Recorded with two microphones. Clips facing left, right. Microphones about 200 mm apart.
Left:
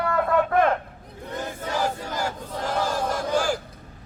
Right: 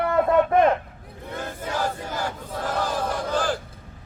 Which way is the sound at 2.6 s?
10° left (ahead or behind).